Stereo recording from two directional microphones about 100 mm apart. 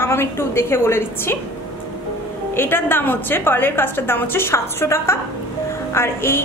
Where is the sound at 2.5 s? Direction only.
20° left (ahead or behind).